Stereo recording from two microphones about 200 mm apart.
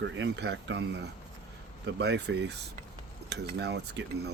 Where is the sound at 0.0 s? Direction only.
65° right (ahead or behind).